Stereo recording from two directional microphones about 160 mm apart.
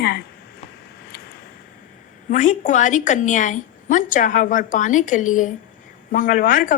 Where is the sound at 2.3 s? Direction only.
50° left (ahead or behind).